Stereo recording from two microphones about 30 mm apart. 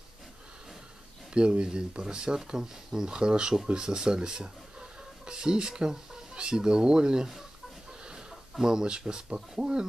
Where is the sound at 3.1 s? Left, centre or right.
Right.